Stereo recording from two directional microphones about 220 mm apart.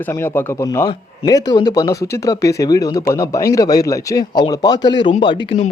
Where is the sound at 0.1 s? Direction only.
10° left (ahead or behind).